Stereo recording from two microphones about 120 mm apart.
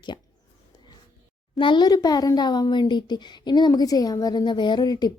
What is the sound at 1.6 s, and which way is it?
Speech, 40° left (ahead or behind).